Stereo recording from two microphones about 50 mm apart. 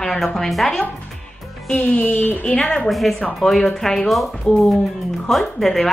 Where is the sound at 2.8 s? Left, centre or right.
Centre.